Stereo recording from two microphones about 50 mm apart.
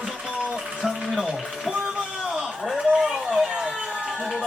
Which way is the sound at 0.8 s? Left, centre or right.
Centre.